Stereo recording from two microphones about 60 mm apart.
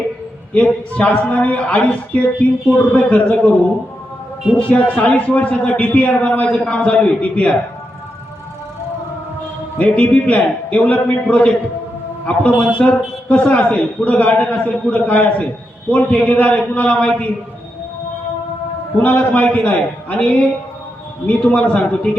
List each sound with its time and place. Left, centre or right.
0.5 s a man's voice: left
4.5 s a man's voice: left
9.7 s a man's voice: left
19.0 s a man's voice: left